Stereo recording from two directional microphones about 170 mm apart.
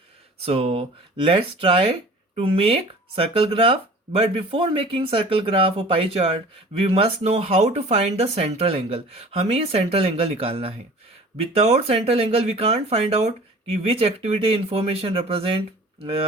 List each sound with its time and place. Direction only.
0.4 s speech: 35° right (ahead or behind)